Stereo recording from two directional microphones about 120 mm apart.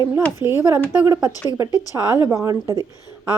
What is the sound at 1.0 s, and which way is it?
Speech, 25° right (ahead or behind).